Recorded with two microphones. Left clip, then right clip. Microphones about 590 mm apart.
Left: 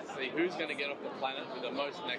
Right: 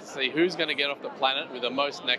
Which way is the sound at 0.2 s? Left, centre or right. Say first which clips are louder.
Right 9 dB; right.